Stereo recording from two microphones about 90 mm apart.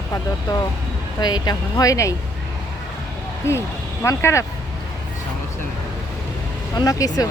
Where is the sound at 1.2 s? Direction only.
50° left (ahead or behind).